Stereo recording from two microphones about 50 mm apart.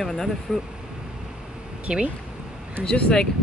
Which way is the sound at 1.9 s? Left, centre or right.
Right.